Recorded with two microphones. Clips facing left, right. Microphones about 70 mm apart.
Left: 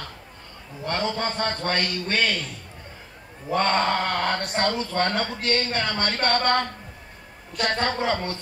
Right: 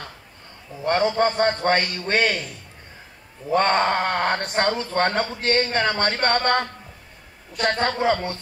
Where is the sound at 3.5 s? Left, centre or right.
Right.